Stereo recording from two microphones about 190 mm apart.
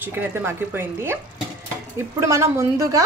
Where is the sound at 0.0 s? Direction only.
10° right (ahead or behind).